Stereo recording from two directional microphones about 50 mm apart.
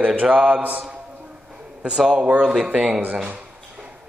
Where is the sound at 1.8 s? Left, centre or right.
Centre.